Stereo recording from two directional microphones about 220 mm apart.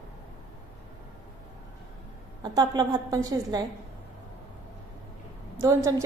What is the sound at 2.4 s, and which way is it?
A woman's voice, 20° right (ahead or behind).